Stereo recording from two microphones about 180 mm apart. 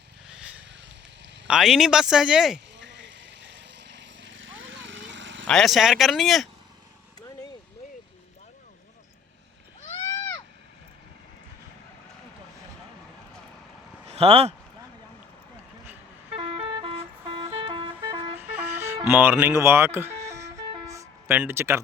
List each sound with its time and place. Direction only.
0.3 s vehicle: 5° right (ahead or behind)
1.5 s speech: 5° right (ahead or behind)
2.7 s vehicle: 85° right
5.5 s speech: centre (ahead or behind)
10.1 s a sound: 20° left (ahead or behind)
14.1 s speech: 35° right (ahead or behind)
16.4 s vehicle: 30° right (ahead or behind)
17.2 s a sound: 25° right (ahead or behind)
17.7 s vehicle: 25° right (ahead or behind)
18.3 s vehicle: 10° right (ahead or behind)
19.1 s music: 10° right (ahead or behind)